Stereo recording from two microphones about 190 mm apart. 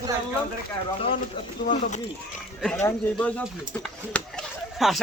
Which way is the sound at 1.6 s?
45° left (ahead or behind).